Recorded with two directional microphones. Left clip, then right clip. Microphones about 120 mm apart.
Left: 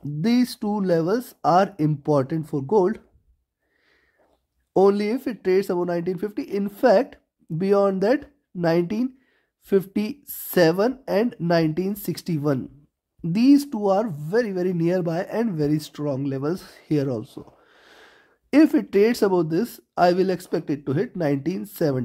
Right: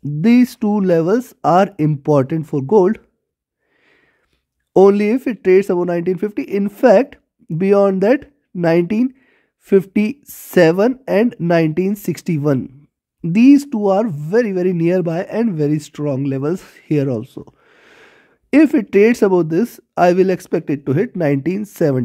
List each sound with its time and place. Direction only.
0.0 s speech: 50° right (ahead or behind)
4.7 s speech: 50° right (ahead or behind)